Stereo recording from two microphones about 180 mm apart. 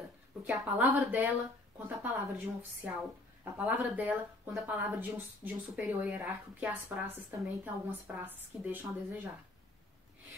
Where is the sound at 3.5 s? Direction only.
10° right (ahead or behind).